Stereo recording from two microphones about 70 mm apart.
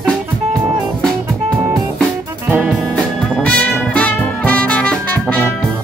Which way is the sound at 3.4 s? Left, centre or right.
Centre.